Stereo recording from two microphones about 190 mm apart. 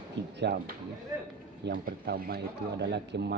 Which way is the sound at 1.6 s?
60° right (ahead or behind).